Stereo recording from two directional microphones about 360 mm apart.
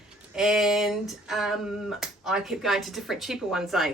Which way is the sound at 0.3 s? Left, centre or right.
Centre.